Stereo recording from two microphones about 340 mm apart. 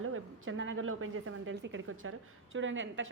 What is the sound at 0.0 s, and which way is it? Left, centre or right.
A woman's voice, right.